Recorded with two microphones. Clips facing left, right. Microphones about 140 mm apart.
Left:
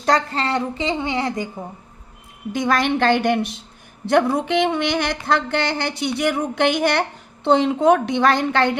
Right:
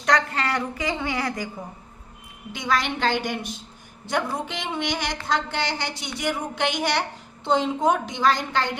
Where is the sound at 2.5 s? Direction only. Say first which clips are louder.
Left 6 dB; 50° left (ahead or behind).